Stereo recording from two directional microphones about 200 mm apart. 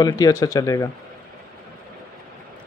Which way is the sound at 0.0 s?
20° left (ahead or behind).